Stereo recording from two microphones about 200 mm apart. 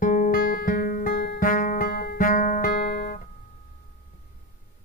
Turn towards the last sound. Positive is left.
turn(degrees=50)  # may be behind; listen again after turning